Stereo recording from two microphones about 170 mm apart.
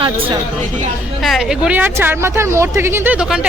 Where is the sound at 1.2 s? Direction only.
Centre (ahead or behind).